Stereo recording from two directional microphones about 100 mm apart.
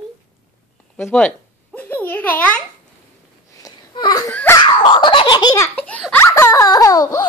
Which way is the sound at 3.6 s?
40° left (ahead or behind).